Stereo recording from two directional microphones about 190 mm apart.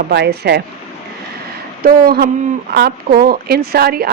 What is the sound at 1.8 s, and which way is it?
Speech, 50° right (ahead or behind).